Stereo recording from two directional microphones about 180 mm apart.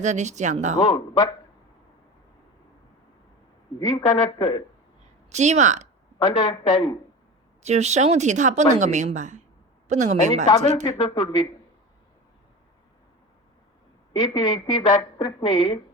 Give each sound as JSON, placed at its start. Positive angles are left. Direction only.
{"t": 0.0, "sound": "speech", "side_deg": -40}
{"t": 0.9, "sound": "a woman's voice", "side_deg": 20}
{"t": 3.8, "sound": "a woman's voice", "side_deg": 20}
{"t": 5.3, "sound": "speech", "side_deg": -40}
{"t": 6.2, "sound": "a woman's voice", "side_deg": 25}
{"t": 7.6, "sound": "speech", "side_deg": -40}
{"t": 10.8, "sound": "a woman's voice", "side_deg": 30}
{"t": 14.2, "sound": "a woman's voice", "side_deg": 25}